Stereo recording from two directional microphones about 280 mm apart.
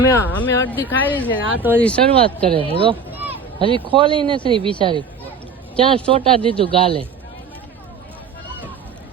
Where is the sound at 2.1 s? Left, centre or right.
Centre.